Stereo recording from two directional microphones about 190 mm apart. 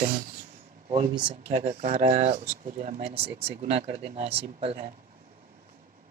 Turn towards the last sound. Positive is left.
turn(degrees=-35)  # may be behind; listen again after turning